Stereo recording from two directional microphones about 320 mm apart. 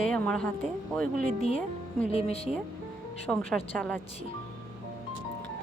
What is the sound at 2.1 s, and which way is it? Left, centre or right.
Speech, centre.